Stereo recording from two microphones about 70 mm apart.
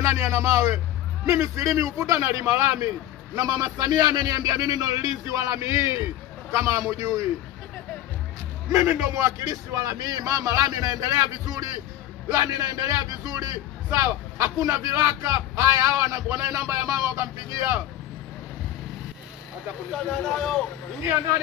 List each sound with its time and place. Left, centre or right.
0.0 s a man's voice: right
3.3 s a man's voice: right
8.6 s a man's voice: right
19.9 s speech: centre